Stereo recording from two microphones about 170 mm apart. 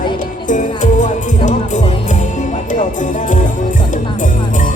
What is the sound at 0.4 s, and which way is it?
Music, 50° left (ahead or behind).